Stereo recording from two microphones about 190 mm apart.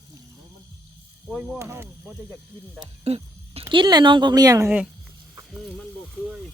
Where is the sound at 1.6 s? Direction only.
15° right (ahead or behind).